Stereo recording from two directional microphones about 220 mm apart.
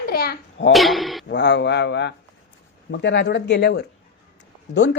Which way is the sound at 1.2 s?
55° left (ahead or behind).